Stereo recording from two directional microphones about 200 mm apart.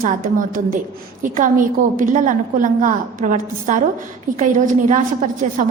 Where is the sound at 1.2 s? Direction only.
40° right (ahead or behind).